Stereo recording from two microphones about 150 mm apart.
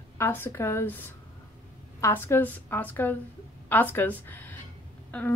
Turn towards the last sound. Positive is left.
turn(degrees=10)  # may be behind; listen again after turning